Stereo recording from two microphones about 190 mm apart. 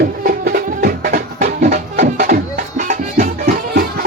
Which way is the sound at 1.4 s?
35° right (ahead or behind).